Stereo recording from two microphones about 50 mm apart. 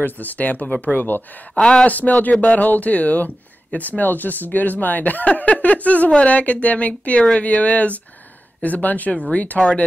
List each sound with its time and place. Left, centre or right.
0.0 s speech: left
1.5 s speech: centre
1.9 s speech: left